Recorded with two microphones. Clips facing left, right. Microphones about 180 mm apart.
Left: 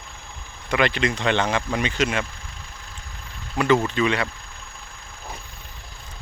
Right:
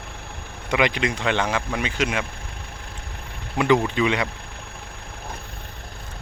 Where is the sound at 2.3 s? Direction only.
60° right (ahead or behind).